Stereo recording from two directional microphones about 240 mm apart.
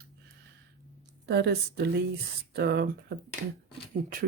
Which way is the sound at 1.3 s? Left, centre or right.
Right.